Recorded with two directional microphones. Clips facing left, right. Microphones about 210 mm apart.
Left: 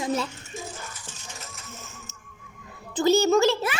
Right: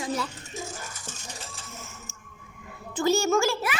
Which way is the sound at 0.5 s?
45° right (ahead or behind).